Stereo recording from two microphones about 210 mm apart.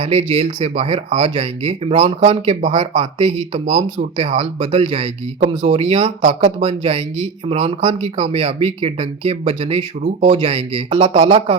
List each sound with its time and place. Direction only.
0.0 s speech: 30° right (ahead or behind)